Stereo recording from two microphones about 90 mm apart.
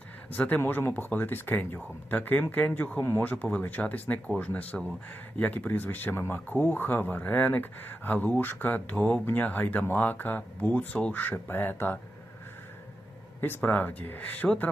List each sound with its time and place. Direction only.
0.3 s speech: 20° left (ahead or behind)
13.4 s speech: 20° left (ahead or behind)